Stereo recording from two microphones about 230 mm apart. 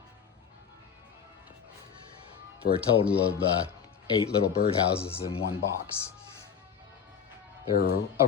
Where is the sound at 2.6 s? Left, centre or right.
Left.